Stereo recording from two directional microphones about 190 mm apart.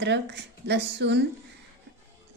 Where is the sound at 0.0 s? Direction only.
65° right (ahead or behind).